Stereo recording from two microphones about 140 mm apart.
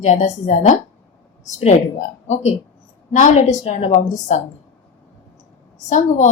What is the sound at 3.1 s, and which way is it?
Speech, 60° left (ahead or behind).